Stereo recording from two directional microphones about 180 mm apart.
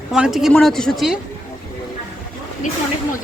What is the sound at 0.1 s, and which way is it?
Speech, centre (ahead or behind).